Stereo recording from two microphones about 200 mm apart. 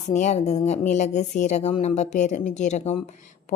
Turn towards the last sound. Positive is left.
turn(degrees=35)  # may be behind; listen again after turning